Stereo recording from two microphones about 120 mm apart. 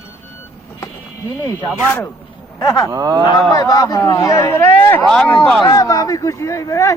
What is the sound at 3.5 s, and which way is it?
Speech, 30° left (ahead or behind).